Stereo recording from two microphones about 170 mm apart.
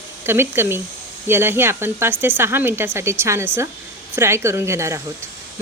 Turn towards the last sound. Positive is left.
turn(degrees=-15)  # may be behind; listen again after turning